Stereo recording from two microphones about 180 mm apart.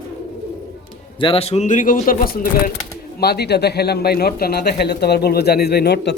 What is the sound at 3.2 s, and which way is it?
A man's voice, 65° left (ahead or behind).